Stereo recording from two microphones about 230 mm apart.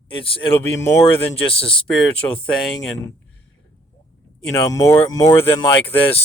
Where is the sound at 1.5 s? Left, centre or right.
Left.